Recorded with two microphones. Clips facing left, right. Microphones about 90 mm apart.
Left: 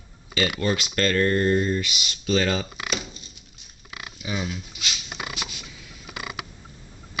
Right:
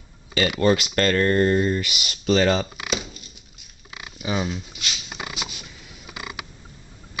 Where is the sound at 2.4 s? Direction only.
35° right (ahead or behind).